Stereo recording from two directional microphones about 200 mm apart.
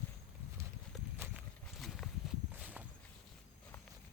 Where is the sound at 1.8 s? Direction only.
Centre (ahead or behind).